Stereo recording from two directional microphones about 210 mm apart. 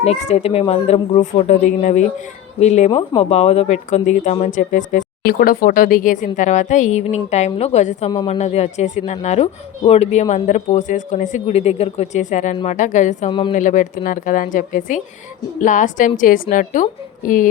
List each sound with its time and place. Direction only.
0.0 s a woman's voice: 30° left (ahead or behind)